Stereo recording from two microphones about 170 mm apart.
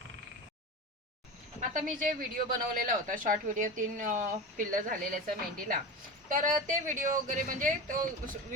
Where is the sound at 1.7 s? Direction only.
50° right (ahead or behind).